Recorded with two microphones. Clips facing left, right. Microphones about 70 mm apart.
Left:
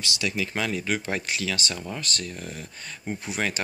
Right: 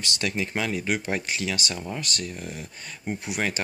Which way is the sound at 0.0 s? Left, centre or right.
Right.